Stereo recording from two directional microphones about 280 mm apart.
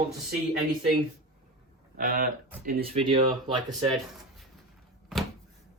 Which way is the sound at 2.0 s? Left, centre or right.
Right.